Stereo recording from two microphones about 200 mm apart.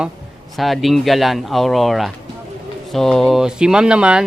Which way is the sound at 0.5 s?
Centre (ahead or behind).